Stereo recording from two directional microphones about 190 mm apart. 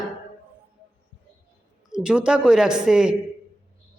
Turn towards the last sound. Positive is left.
turn(degrees=-5)  # may be behind; listen again after turning